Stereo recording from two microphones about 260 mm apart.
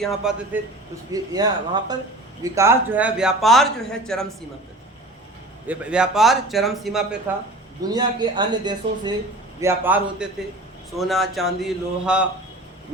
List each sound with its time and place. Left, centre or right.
0.0 s a man's voice: centre
1.1 s a man's voice: centre
5.6 s a man's voice: centre
7.8 s a man's voice: centre